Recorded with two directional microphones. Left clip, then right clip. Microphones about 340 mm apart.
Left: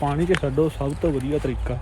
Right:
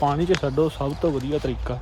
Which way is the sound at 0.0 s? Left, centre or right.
Centre.